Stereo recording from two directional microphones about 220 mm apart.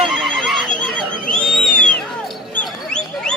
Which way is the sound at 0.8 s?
Centre (ahead or behind).